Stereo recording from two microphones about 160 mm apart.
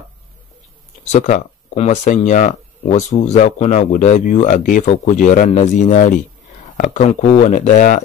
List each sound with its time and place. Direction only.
1.1 s speech: 50° left (ahead or behind)